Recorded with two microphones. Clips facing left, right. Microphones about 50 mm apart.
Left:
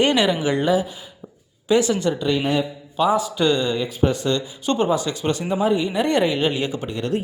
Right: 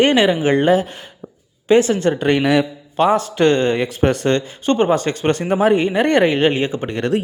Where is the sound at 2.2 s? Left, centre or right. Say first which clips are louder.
Right 7 dB; right.